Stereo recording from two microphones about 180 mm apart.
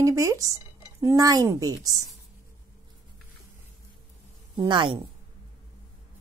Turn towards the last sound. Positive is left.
turn(degrees=-25)  # may be behind; listen again after turning